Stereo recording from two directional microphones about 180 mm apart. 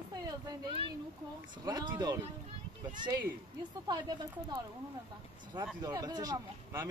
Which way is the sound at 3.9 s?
20° right (ahead or behind).